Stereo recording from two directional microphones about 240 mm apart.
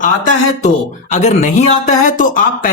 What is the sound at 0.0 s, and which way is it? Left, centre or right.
Speech, left.